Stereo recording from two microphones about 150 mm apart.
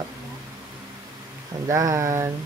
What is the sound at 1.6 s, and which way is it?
Speech, 20° right (ahead or behind).